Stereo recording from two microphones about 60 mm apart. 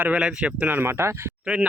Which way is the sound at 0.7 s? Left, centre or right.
Right.